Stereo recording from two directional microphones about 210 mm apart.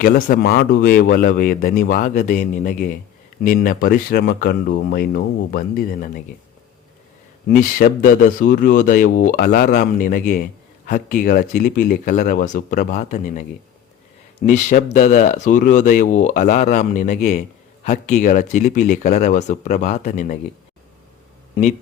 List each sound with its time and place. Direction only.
0.0 s speech: 45° left (ahead or behind)
3.4 s speech: 45° left (ahead or behind)
7.4 s speech: 40° left (ahead or behind)
14.4 s speech: 35° left (ahead or behind)